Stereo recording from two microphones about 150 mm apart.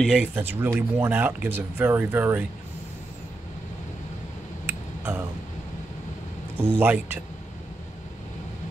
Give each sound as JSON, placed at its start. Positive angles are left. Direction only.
{"t": 0.0, "sound": "speech", "side_deg": -5}
{"t": 4.6, "sound": "a sound", "side_deg": -15}
{"t": 6.7, "sound": "speech", "side_deg": -15}